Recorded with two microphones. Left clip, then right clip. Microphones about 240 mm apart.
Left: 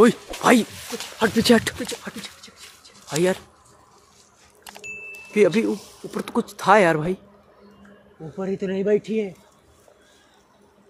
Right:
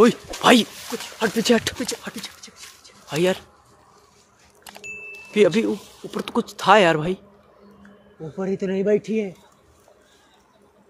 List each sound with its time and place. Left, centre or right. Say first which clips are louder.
0.4 s speech: right 2 dB; centre
1.2 s speech: left 2 dB; centre
1.6 s speech: right 1 dB; centre
2.2 s a sound: right 2 dB; right
3.1 s speech: even; centre
4.6 s speech: even; centre
8.4 s speech: right 1 dB; right